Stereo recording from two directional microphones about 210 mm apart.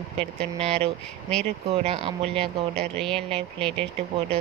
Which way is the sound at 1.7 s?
30° right (ahead or behind).